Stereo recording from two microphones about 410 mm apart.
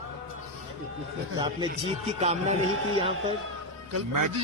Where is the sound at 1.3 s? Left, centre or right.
Centre.